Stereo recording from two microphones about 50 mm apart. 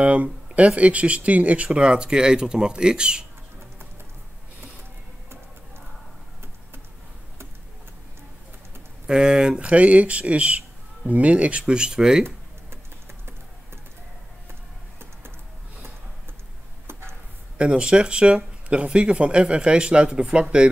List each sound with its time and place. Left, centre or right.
0.0 s speech: right
9.0 s speech: centre
17.6 s speech: right